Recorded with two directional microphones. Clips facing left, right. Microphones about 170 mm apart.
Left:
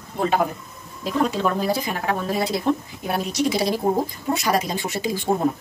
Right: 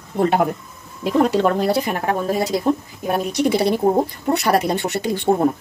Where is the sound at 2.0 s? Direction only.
45° right (ahead or behind).